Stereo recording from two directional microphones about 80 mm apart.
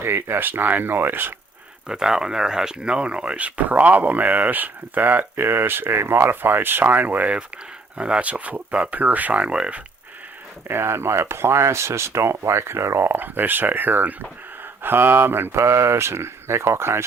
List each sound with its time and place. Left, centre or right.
0.0 s speech: right
1.9 s speech: centre
10.7 s speech: right